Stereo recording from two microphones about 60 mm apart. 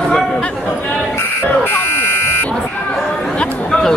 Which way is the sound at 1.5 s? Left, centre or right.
Left.